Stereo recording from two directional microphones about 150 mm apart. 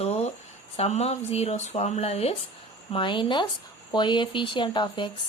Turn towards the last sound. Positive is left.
turn(degrees=30)  # may be behind; listen again after turning